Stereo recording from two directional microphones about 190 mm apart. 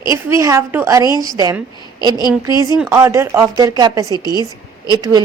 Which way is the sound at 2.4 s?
20° right (ahead or behind).